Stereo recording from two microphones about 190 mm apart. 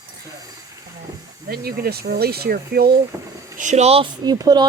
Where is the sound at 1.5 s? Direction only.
55° right (ahead or behind).